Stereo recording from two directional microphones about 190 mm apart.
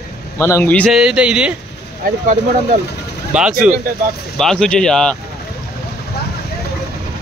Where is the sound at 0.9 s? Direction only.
5° right (ahead or behind).